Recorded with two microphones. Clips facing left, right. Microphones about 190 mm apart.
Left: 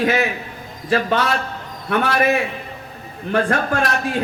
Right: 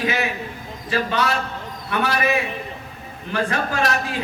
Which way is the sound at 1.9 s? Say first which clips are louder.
Left 4 dB; 55° left (ahead or behind).